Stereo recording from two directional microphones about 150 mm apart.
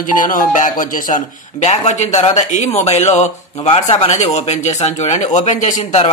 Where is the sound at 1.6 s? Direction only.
50° left (ahead or behind).